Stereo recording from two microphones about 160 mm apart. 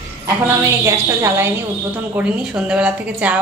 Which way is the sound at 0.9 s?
20° right (ahead or behind).